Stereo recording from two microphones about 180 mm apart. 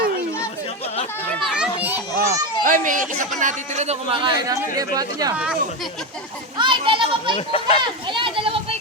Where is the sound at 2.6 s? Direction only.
50° right (ahead or behind); by 5.3 s 20° right (ahead or behind).